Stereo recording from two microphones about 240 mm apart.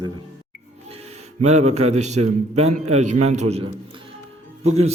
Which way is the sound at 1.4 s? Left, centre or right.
Right.